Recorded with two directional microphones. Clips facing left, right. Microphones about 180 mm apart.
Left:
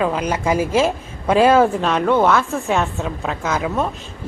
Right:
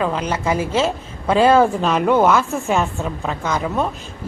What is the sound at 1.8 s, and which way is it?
A woman's voice, centre (ahead or behind).